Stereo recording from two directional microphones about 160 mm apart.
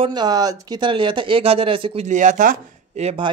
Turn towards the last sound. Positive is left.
turn(degrees=-35)  # may be behind; listen again after turning